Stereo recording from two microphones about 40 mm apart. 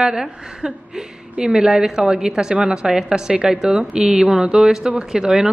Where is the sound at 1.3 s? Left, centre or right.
Right.